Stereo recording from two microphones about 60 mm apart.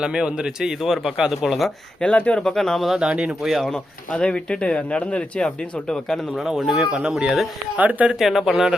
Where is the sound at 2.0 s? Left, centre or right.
Left.